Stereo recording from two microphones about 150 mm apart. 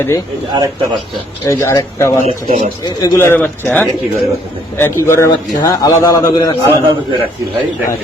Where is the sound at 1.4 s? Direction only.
20° left (ahead or behind).